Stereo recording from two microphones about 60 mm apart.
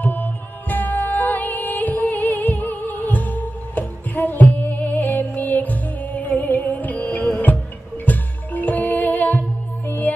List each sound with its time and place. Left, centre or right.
0.0 s music: left